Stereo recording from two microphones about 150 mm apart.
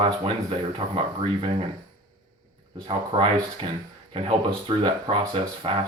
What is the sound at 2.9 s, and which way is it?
Speech, 40° right (ahead or behind).